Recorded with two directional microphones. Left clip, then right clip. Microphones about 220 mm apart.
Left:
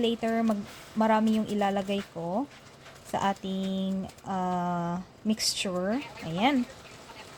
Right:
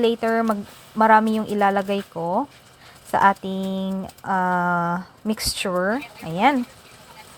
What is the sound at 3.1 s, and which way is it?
Speech, 10° right (ahead or behind).